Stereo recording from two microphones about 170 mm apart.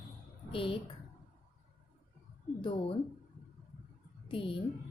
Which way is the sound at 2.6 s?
30° left (ahead or behind).